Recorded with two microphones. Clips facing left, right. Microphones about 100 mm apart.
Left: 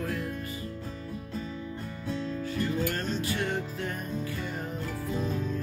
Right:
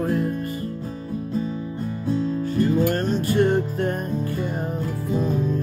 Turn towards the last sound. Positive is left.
turn(degrees=-50)  # may be behind; listen again after turning